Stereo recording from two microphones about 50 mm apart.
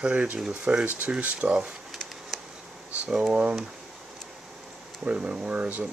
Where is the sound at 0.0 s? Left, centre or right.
Centre.